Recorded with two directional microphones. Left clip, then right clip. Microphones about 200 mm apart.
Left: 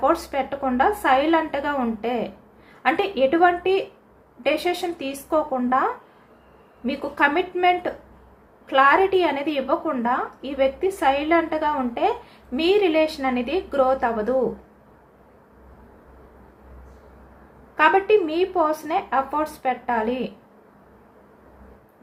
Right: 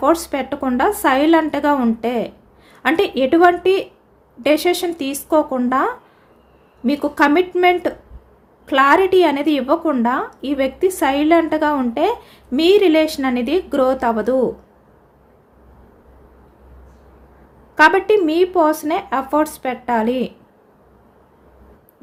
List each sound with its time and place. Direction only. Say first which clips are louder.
0.0 s a woman's voice: right 4 dB; 65° right (ahead or behind)
17.7 s a woman's voice: right 5 dB; 70° right (ahead or behind)